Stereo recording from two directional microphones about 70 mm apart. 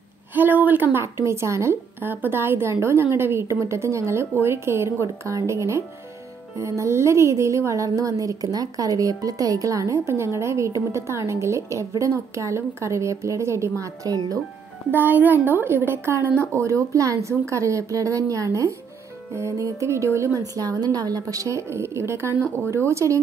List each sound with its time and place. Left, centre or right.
0.3 s a woman's voice: right
1.0 s a woman's voice: right
14.9 s a woman's voice: right
16.5 s speech: right
20.5 s a woman's voice: right
21.6 s a woman's voice: right